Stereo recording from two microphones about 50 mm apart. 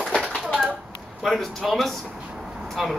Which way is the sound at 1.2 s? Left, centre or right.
Centre.